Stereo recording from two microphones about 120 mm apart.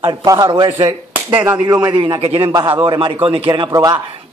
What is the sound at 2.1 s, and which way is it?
A man's voice, 50° right (ahead or behind).